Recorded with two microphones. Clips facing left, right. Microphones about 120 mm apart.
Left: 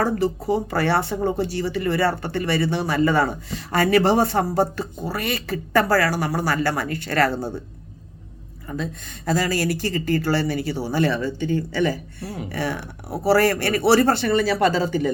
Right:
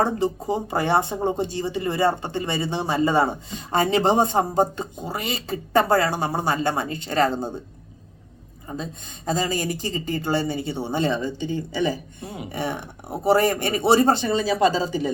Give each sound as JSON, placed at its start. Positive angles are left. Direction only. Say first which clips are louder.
{"t": 0.0, "sound": "speech", "louder": "left 1 dB", "side_deg": -25}
{"t": 8.6, "sound": "speech", "louder": "left 3 dB", "side_deg": -20}